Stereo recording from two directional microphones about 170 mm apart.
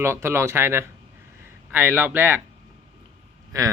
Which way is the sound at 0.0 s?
15° right (ahead or behind).